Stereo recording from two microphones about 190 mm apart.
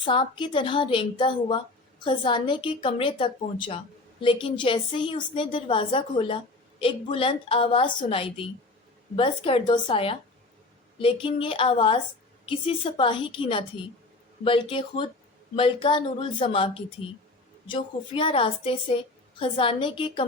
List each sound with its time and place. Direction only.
0.0 s a woman's voice: 25° left (ahead or behind)
17.7 s a woman's voice: 25° left (ahead or behind)